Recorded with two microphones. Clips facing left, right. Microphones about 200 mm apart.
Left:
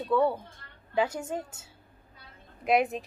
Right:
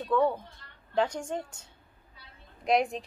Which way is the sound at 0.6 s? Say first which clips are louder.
Left 2 dB; 50° left (ahead or behind).